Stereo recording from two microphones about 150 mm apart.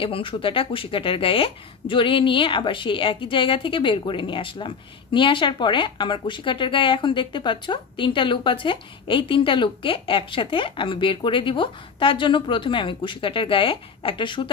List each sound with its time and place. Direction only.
0.0 s a woman's voice: 35° left (ahead or behind)